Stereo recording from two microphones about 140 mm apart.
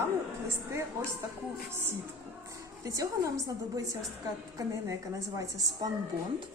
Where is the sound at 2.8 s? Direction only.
25° right (ahead or behind).